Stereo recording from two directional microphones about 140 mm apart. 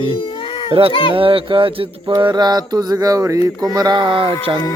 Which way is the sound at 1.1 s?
40° right (ahead or behind).